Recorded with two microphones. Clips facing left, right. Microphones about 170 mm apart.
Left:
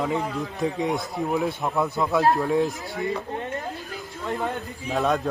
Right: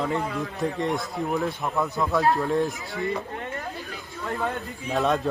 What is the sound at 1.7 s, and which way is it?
Speech, 15° left (ahead or behind).